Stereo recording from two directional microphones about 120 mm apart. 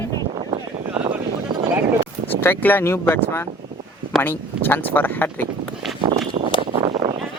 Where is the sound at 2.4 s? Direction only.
15° left (ahead or behind).